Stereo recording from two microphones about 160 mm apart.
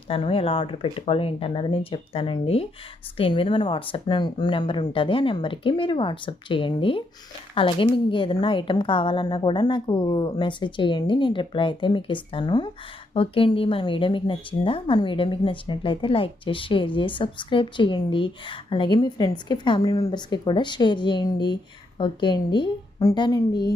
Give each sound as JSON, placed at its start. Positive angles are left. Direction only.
{"t": 0.1, "sound": "speech", "side_deg": 35}